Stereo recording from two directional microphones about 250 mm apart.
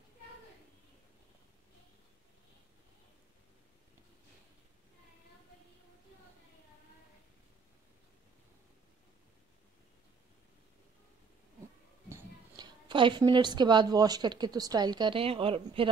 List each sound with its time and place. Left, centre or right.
12.1 s a woman's voice: centre